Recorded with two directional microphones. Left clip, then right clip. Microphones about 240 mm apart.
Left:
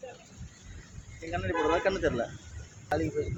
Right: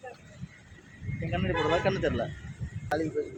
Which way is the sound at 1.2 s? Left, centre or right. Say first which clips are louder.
Even; centre.